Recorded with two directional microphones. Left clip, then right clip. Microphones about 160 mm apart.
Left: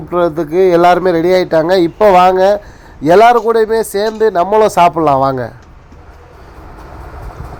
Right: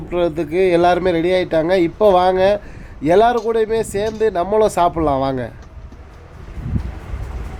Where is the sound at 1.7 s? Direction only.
10° left (ahead or behind).